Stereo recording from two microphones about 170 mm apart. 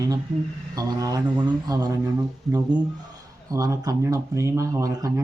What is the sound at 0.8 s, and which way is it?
Speech, 20° right (ahead or behind).